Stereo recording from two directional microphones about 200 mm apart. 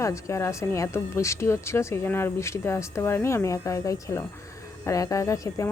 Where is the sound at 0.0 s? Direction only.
15° left (ahead or behind).